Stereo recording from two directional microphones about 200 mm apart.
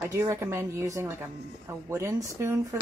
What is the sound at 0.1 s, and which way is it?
Speech, 15° right (ahead or behind).